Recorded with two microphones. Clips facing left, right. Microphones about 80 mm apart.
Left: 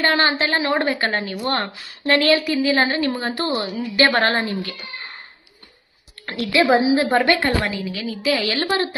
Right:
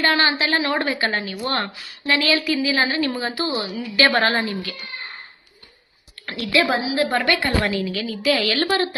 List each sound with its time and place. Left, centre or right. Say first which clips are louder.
0.0 s a woman's voice: left 1 dB; left
0.9 s a woman's voice: left 1 dB; left
6.2 s a woman's voice: left 3 dB; left
7.9 s a woman's voice: right 1 dB; centre
8.2 s a woman's voice: right 1 dB; centre